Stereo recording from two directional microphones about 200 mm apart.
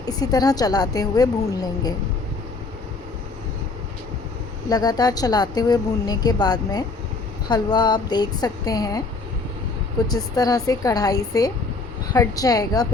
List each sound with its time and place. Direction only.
0.0 s a woman's voice: 20° left (ahead or behind)
4.7 s a woman's voice: 20° left (ahead or behind)
10.1 s a woman's voice: 20° left (ahead or behind)